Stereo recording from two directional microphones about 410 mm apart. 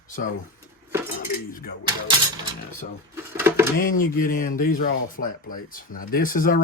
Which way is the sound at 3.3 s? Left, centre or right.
Centre.